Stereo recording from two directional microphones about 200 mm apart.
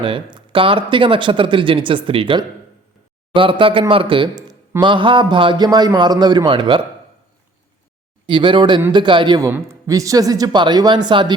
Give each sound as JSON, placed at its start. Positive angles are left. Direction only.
{"t": 0.0, "sound": "speech", "side_deg": -25}
{"t": 8.3, "sound": "speech", "side_deg": -25}